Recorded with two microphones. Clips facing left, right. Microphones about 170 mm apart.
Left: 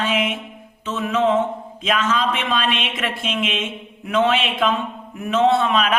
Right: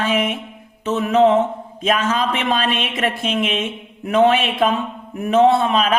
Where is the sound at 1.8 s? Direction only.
40° right (ahead or behind).